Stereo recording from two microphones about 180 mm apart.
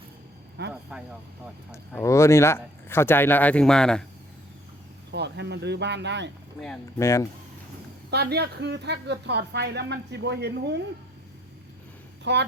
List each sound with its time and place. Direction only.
0.7 s vehicle: 5° right (ahead or behind)
2.0 s speech: 15° left (ahead or behind)
5.1 s a woman's voice: 70° right (ahead or behind)
7.0 s speech: 15° left (ahead or behind)
8.1 s a woman's voice: 65° right (ahead or behind)
12.2 s speech: 75° right (ahead or behind)